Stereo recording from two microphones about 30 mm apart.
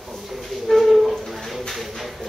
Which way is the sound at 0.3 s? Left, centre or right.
Centre.